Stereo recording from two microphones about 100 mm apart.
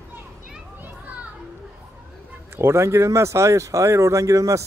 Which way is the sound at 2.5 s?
25° right (ahead or behind).